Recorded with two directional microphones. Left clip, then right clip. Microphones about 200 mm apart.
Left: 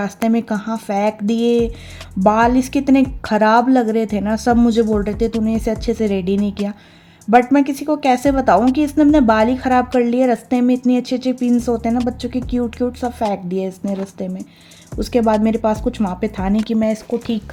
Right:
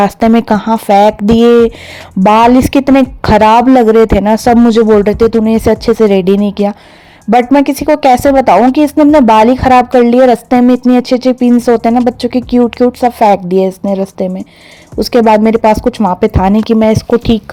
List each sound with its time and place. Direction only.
0.0 s speech: 35° right (ahead or behind)